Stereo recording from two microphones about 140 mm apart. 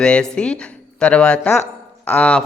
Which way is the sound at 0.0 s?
5° left (ahead or behind).